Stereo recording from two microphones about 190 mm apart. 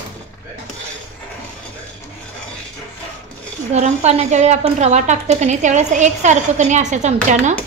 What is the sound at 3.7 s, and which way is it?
A woman's voice, 35° right (ahead or behind).